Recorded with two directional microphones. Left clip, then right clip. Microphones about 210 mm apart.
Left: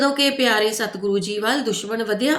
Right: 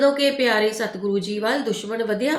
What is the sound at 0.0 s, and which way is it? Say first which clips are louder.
A woman's voice: even; 45° left (ahead or behind).